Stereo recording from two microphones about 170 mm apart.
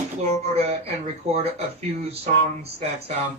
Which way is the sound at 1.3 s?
35° right (ahead or behind).